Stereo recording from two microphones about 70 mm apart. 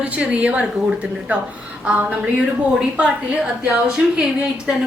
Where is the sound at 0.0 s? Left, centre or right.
Centre.